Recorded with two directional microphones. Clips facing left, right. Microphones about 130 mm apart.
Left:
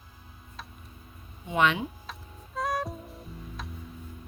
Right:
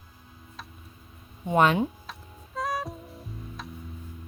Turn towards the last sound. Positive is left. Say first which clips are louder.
# right 1 dB
turn(degrees=0)  # may be behind; listen again after turning